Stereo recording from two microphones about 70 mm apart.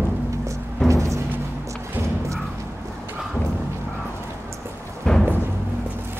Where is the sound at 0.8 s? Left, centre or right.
Right.